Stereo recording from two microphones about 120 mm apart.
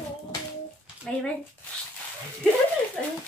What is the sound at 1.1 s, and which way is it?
Speech, 5° left (ahead or behind).